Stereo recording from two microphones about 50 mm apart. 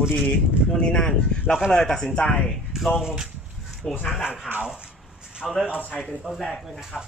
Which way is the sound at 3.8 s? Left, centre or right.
Centre.